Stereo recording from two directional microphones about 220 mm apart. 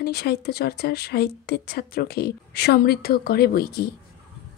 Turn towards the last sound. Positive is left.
turn(degrees=45)  # may be behind; listen again after turning